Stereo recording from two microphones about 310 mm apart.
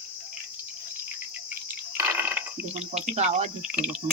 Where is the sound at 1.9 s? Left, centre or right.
Centre.